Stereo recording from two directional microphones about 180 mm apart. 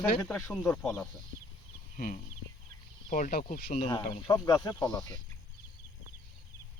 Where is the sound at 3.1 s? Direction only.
45° left (ahead or behind).